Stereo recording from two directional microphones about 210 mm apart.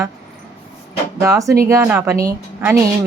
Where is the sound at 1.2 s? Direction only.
15° right (ahead or behind).